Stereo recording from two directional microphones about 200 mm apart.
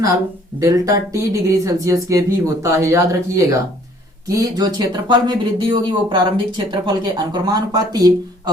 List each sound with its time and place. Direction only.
0.6 s speech: 15° right (ahead or behind)